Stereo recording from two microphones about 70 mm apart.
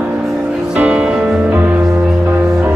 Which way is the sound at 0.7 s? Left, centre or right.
Centre.